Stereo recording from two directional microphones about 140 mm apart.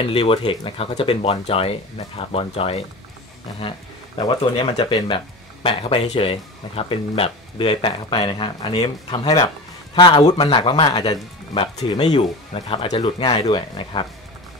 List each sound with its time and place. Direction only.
0.0 s speech: 40° left (ahead or behind)
4.6 s speech: 35° left (ahead or behind)
12.5 s speech: 45° left (ahead or behind)